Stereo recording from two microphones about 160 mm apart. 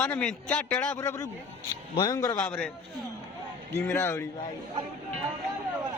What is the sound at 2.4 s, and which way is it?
Speech, 10° left (ahead or behind).